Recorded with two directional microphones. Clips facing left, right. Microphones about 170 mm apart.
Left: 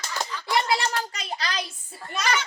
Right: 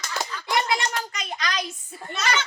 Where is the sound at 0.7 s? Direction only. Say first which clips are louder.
Left 1 dB; 35° left (ahead or behind).